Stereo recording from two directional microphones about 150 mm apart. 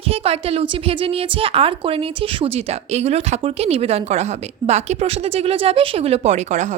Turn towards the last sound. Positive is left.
turn(degrees=-55)  # may be behind; listen again after turning